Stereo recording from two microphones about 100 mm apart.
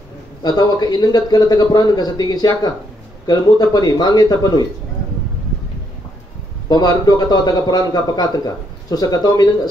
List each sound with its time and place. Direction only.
0.4 s a man's voice: 45° left (ahead or behind)
6.7 s a man's voice: 45° left (ahead or behind)